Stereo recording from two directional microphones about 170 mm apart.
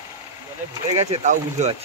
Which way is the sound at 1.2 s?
45° right (ahead or behind).